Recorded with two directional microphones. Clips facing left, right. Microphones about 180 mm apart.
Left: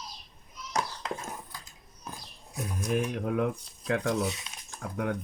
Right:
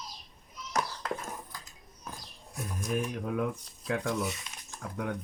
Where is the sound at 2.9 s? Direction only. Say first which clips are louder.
Left 3 dB; 60° left (ahead or behind).